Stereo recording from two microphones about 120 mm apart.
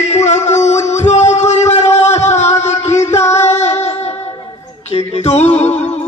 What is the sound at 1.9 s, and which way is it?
Music, 70° left (ahead or behind).